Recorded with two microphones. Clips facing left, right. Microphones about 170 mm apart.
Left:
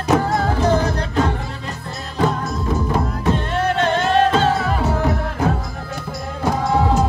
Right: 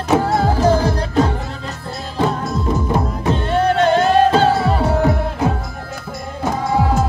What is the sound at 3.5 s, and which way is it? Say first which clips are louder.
Music: right 8 dB; 35° right (ahead or behind).